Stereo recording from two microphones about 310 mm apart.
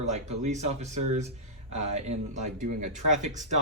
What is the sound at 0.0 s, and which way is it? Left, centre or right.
Speech, right.